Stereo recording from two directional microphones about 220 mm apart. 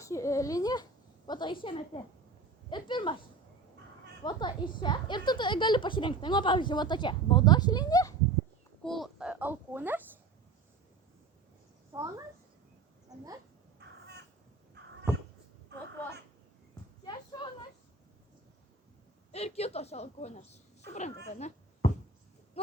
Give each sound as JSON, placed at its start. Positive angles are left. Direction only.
{"t": 0.0, "sound": "speech", "side_deg": 15}
{"t": 4.2, "sound": "speech", "side_deg": 20}
{"t": 8.8, "sound": "a child's voice", "side_deg": 0}
{"t": 11.9, "sound": "a woman's voice", "side_deg": -15}
{"t": 13.7, "sound": "crow", "side_deg": -50}
{"t": 17.1, "sound": "a sound", "side_deg": 20}
{"t": 19.3, "sound": "speech", "side_deg": 30}
{"t": 21.2, "sound": "a sound", "side_deg": 30}
{"t": 22.6, "sound": "sheep", "side_deg": 25}